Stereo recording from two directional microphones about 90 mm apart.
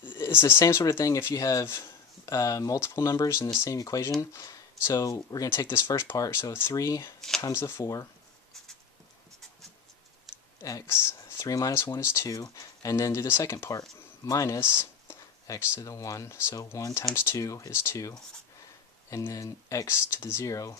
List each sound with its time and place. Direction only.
0.0 s speech: 25° left (ahead or behind); by 5.5 s 40° left (ahead or behind)
5.7 s speech: 30° left (ahead or behind)
7.2 s speech: 5° left (ahead or behind)
7.5 s speech: 30° left (ahead or behind)
10.6 s speech: 40° left (ahead or behind)
12.0 s speech: 30° left (ahead or behind)
14.6 s a sound: 25° left (ahead or behind)
15.7 s speech: 35° left (ahead or behind)
17.1 s speech: 30° left (ahead or behind)